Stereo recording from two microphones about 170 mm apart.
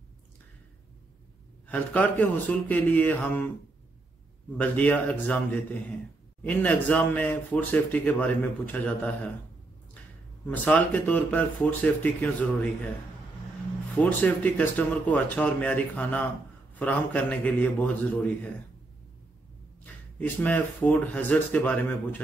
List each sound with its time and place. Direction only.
1.7 s speech: 10° left (ahead or behind)
4.6 s speech: 10° left (ahead or behind)
10.4 s speech: 10° left (ahead or behind)
13.9 s speech: 10° left (ahead or behind)
19.8 s speech: 10° left (ahead or behind)